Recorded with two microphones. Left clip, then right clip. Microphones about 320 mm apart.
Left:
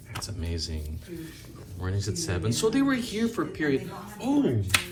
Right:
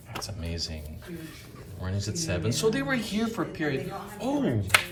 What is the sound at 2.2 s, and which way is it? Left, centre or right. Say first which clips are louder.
Speech: right 1 dB; centre.